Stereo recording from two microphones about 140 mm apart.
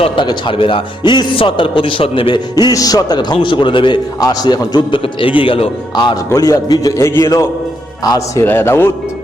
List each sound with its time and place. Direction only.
0.0 s a man's voice: 35° left (ahead or behind)
8.4 s a man's voice: 15° left (ahead or behind)